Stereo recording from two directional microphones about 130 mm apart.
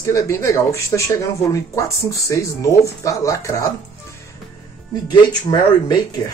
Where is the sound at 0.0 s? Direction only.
20° left (ahead or behind).